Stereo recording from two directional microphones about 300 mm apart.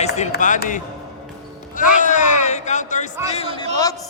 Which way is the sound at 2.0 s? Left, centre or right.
Left.